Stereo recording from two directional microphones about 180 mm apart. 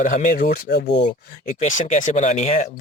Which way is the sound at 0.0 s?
45° left (ahead or behind).